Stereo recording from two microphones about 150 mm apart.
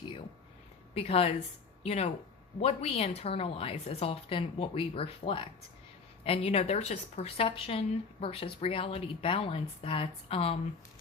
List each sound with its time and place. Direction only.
0.9 s speech: 40° left (ahead or behind)